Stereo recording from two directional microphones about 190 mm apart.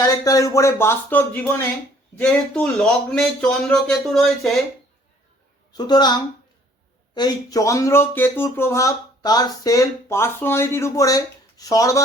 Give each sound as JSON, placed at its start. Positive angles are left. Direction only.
{"t": 0.0, "sound": "speech", "side_deg": 20}
{"t": 5.7, "sound": "speech", "side_deg": 20}